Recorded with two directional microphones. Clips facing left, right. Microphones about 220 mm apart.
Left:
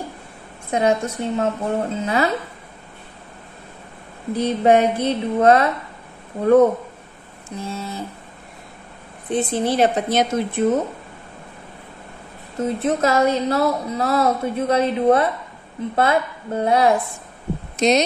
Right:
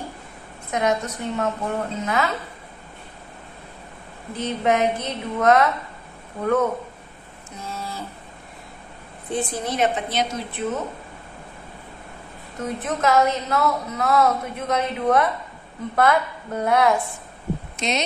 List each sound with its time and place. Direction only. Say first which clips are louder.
0.7 s a woman's voice: left 4 dB; 30° left (ahead or behind)
4.4 s a woman's voice: left 5 dB; 35° left (ahead or behind)
7.5 s a sound: left 5 dB; 25° left (ahead or behind)
9.3 s a woman's voice: left 6 dB; 25° left (ahead or behind); by 10.8 s 45° left (ahead or behind)
12.5 s a woman's voice: left 6 dB; 30° left (ahead or behind)